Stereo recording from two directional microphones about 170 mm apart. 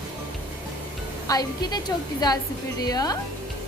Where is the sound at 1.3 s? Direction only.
20° left (ahead or behind).